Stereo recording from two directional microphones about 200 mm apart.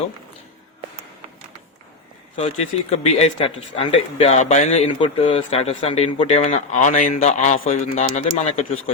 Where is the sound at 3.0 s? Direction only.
30° left (ahead or behind).